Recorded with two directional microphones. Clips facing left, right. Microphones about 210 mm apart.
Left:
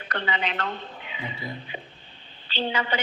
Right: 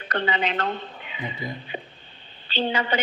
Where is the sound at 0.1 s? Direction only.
40° right (ahead or behind).